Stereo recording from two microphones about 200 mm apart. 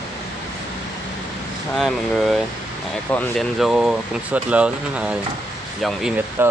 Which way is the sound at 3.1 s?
5° left (ahead or behind).